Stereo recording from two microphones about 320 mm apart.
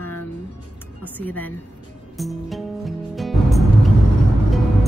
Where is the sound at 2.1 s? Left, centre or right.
Centre.